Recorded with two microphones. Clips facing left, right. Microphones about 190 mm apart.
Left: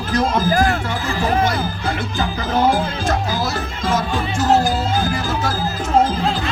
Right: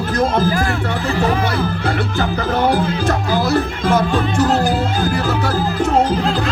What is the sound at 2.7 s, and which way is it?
Music, 60° right (ahead or behind).